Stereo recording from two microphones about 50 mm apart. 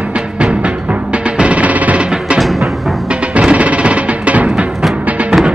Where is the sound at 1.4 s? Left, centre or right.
Right.